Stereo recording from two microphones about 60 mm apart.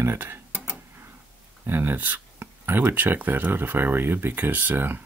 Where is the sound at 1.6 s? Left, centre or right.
Right.